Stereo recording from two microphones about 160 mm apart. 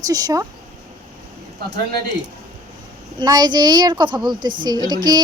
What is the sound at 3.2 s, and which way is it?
A woman's voice, 25° right (ahead or behind).